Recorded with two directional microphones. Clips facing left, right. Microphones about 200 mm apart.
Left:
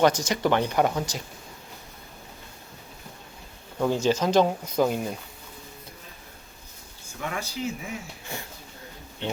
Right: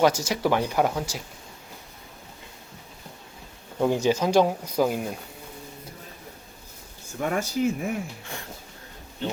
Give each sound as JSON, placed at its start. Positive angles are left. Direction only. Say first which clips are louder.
{"t": 0.0, "sound": "speech", "louder": "even", "side_deg": -5}
{"t": 3.8, "sound": "speech", "louder": "right 1 dB", "side_deg": -15}
{"t": 7.2, "sound": "speech", "louder": "right 7 dB", "side_deg": -45}